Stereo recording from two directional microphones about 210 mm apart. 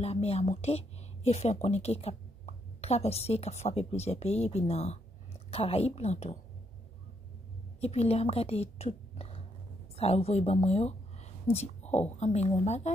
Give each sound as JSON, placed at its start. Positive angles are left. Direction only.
{"t": 0.0, "sound": "speech", "side_deg": 30}
{"t": 7.8, "sound": "a woman's voice", "side_deg": 30}